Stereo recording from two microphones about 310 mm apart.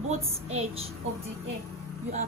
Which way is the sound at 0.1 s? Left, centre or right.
Centre.